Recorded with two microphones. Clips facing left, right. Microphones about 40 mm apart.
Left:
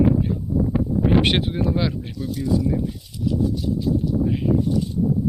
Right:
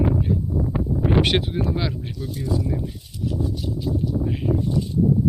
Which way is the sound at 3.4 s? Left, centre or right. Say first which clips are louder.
Left 5 dB; right.